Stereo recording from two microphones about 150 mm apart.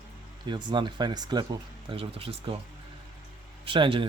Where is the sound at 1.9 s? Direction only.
40° right (ahead or behind).